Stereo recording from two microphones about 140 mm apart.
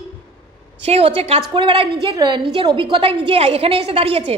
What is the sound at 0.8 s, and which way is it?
A woman's voice, 45° right (ahead or behind).